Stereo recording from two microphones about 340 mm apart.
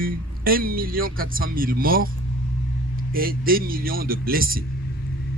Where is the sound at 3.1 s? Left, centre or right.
Right.